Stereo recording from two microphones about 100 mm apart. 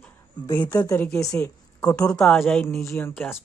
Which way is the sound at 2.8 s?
30° left (ahead or behind).